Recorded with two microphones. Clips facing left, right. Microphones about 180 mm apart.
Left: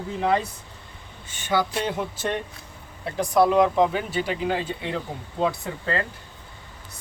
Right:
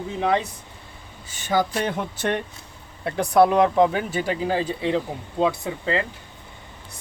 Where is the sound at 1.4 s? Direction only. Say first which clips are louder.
Right 2 dB; 45° right (ahead or behind).